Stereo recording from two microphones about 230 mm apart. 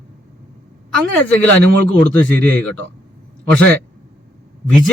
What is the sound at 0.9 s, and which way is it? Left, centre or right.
A man's voice, centre.